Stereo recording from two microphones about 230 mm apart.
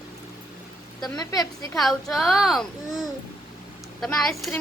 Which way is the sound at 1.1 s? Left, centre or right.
Centre.